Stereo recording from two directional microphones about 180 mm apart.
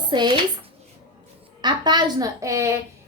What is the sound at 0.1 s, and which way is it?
Speech, 25° right (ahead or behind).